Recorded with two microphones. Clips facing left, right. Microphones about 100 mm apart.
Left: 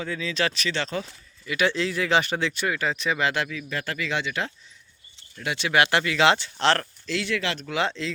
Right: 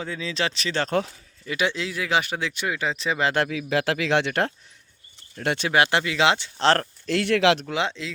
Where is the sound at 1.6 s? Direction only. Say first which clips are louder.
Left 2 dB; 15° right (ahead or behind).